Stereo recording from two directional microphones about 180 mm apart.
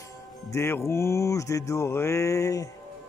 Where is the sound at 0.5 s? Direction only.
15° left (ahead or behind).